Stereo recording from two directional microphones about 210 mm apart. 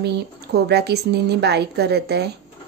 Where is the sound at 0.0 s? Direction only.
50° right (ahead or behind).